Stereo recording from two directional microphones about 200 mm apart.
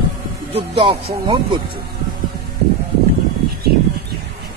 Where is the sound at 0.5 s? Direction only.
25° right (ahead or behind).